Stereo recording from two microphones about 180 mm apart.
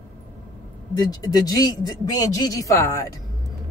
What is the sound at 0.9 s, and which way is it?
Speech, 20° left (ahead or behind).